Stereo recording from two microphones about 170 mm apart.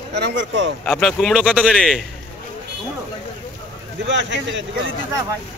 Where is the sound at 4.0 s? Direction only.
90° right.